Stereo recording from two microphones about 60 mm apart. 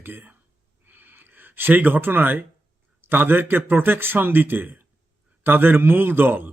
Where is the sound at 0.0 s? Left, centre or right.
Right.